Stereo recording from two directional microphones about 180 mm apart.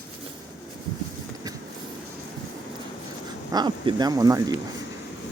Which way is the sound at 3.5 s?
25° right (ahead or behind).